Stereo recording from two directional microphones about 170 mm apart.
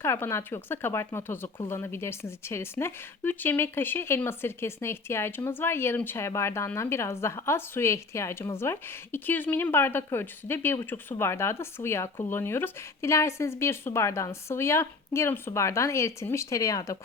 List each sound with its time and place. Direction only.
0.0 s speech: 15° left (ahead or behind)